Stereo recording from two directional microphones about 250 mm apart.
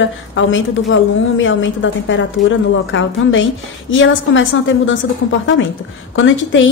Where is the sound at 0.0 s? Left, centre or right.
Left.